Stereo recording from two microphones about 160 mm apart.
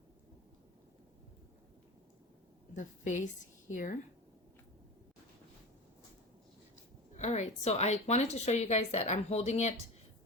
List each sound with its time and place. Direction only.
2.7 s speech: 50° left (ahead or behind)
7.2 s speech: 45° left (ahead or behind)